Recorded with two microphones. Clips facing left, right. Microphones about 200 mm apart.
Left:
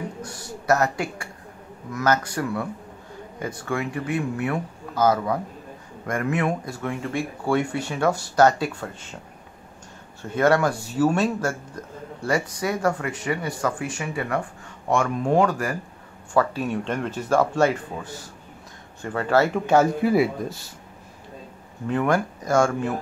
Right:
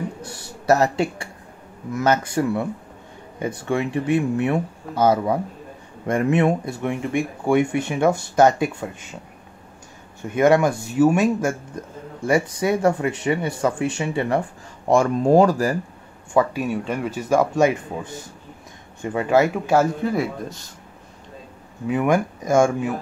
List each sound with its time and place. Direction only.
0.2 s speech: 25° right (ahead or behind)
10.2 s speech: 15° right (ahead or behind)
16.3 s speech: 10° right (ahead or behind); by 20.5 s 5° left (ahead or behind)
21.8 s speech: 15° right (ahead or behind)